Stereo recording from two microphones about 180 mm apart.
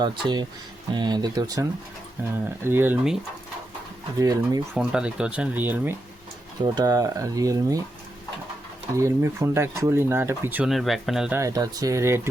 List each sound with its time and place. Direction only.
0.0 s speech: 25° right (ahead or behind)
2.6 s speech: 10° right (ahead or behind)
4.2 s speech: 20° right (ahead or behind)
4.8 s speech: 5° right (ahead or behind)
6.7 s speech: 20° right (ahead or behind)
9.0 s speech: 15° right (ahead or behind)
11.3 s speech: 20° right (ahead or behind)